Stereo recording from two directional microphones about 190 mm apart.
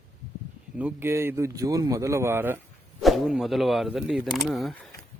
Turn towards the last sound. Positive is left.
turn(degrees=0)  # may be behind; listen again after turning